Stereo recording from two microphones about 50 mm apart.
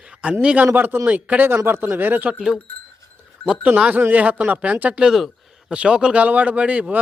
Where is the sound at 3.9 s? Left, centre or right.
Right.